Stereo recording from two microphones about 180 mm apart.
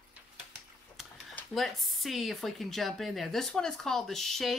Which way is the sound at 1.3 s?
Centre (ahead or behind).